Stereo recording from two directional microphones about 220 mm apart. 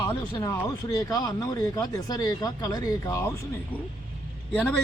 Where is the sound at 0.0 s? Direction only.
20° left (ahead or behind).